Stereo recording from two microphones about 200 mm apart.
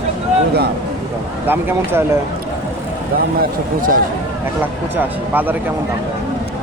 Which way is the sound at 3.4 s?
45° right (ahead or behind).